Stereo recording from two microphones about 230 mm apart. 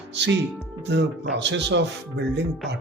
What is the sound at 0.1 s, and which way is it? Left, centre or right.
Speech, right.